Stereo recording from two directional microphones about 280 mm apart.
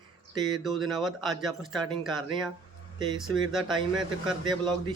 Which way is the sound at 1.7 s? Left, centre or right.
Centre.